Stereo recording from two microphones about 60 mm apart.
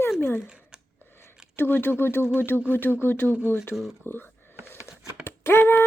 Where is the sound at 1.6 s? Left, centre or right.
Left.